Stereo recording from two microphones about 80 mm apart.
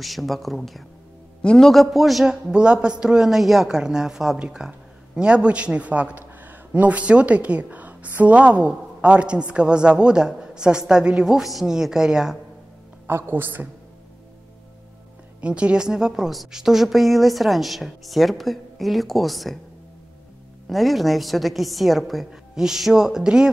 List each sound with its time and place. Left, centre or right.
0.0 s a woman's voice: centre
2.5 s a woman's voice: centre
13.0 s a woman's voice: right
15.4 s a woman's voice: centre
20.6 s a woman's voice: centre